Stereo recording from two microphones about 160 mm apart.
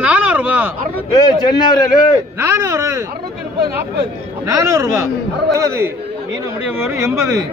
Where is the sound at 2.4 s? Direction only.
15° right (ahead or behind).